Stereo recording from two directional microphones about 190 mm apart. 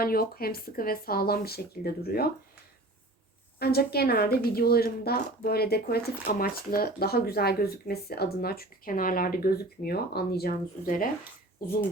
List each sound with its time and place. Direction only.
0.0 s speech: 50° left (ahead or behind)
3.6 s speech: 55° left (ahead or behind)